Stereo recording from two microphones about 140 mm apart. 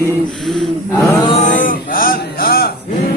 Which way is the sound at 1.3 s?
60° left (ahead or behind).